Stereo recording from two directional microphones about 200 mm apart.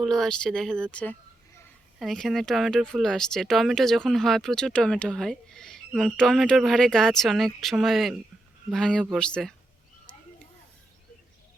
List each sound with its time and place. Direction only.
0.0 s speech: centre (ahead or behind)